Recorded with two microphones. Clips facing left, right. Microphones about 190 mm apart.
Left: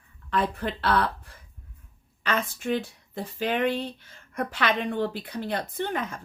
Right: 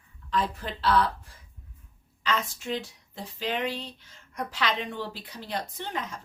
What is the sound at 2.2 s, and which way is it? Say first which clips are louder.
Speech: left 3 dB; 55° left (ahead or behind).